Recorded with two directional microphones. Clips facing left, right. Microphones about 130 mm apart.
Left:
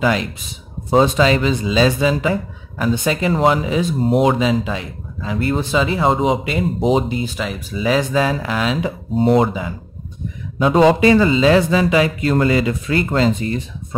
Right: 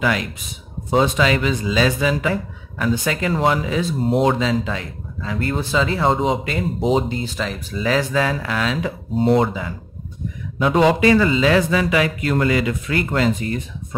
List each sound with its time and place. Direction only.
0.0 s a man's voice: 25° left (ahead or behind)
4.0 s speech: 10° left (ahead or behind)
10.6 s a man's voice: 30° left (ahead or behind)